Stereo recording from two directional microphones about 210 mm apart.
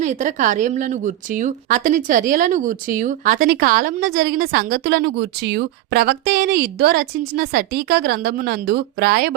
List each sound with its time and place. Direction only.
0.0 s a woman's voice: 35° right (ahead or behind)